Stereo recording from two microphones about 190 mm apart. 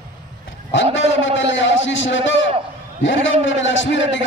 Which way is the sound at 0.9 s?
75° left (ahead or behind).